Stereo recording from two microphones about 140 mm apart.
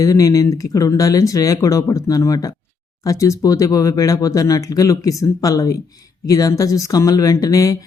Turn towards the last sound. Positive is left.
turn(degrees=25)  # may be behind; listen again after turning